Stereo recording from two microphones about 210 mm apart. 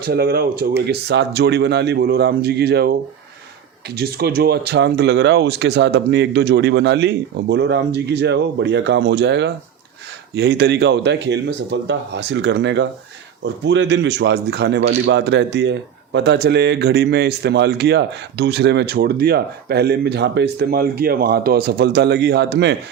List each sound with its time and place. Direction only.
0.0 s a man's voice: 50° right (ahead or behind)